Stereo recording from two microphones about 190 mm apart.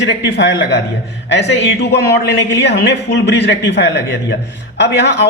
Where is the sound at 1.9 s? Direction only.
65° left (ahead or behind).